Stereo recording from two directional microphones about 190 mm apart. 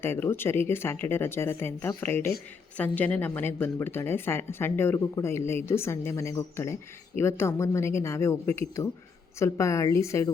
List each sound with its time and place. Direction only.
0.0 s speech: 10° left (ahead or behind)